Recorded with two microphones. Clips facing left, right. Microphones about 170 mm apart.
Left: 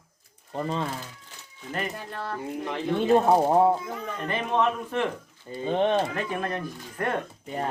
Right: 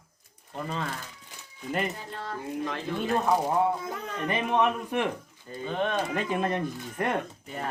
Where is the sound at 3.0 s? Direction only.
25° left (ahead or behind).